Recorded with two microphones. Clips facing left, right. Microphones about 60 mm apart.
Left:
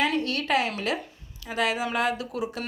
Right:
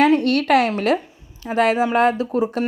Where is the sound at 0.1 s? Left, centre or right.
Right.